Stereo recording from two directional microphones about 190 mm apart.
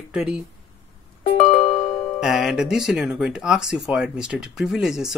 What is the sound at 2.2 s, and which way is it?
Speech, centre (ahead or behind).